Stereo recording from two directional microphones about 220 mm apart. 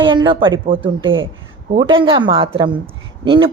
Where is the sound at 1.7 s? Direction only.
25° right (ahead or behind).